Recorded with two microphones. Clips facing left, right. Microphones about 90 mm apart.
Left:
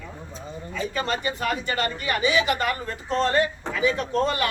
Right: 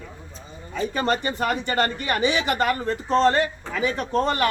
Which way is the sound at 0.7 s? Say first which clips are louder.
Right 4 dB; 45° right (ahead or behind).